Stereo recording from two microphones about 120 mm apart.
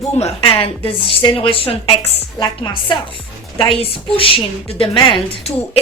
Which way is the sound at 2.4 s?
40° left (ahead or behind).